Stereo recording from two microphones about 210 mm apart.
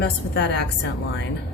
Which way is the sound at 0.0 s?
55° left (ahead or behind).